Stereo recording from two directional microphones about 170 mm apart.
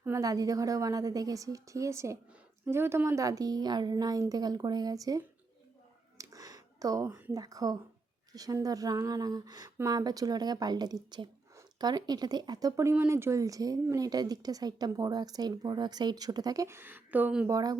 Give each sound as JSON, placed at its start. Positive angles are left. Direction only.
{"t": 0.0, "sound": "speech", "side_deg": -20}
{"t": 6.1, "sound": "a sound", "side_deg": -20}
{"t": 8.3, "sound": "speech", "side_deg": -20}